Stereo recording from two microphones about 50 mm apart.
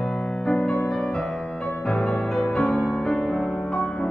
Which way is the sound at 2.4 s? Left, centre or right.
Centre.